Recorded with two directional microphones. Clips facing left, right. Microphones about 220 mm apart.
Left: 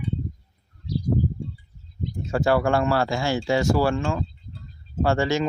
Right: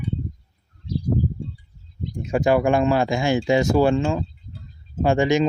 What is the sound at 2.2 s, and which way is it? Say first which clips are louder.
Speech: right 3 dB; 15° right (ahead or behind).